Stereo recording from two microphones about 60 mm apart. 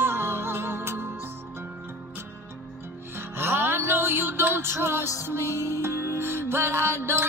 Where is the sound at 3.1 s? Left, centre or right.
Right.